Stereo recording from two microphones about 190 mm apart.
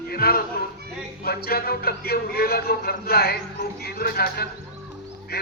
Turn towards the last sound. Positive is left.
turn(degrees=55)  # may be behind; listen again after turning